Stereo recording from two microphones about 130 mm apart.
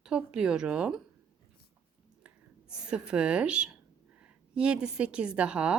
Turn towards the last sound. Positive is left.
turn(degrees=-10)  # may be behind; listen again after turning